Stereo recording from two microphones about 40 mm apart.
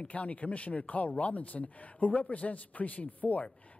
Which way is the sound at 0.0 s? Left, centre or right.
Left.